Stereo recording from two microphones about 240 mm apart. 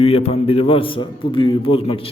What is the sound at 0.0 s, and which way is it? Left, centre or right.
A man's voice, left.